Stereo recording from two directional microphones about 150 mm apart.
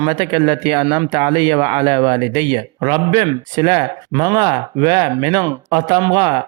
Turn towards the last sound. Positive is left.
turn(degrees=-30)  # may be behind; listen again after turning